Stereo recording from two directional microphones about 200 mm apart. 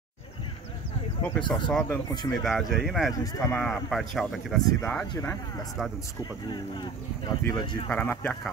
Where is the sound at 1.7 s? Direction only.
5° left (ahead or behind).